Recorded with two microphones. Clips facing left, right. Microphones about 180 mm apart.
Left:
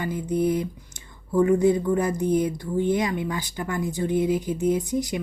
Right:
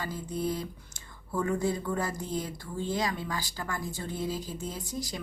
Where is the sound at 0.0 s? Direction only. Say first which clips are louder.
Left 9 dB; 20° left (ahead or behind).